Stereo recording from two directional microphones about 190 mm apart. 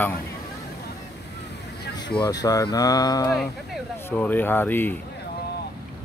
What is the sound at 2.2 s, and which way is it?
Speech, 20° left (ahead or behind).